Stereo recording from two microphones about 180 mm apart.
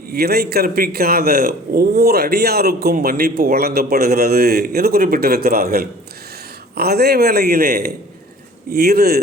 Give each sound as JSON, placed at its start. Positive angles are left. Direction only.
{"t": 0.1, "sound": "a man's voice", "side_deg": -60}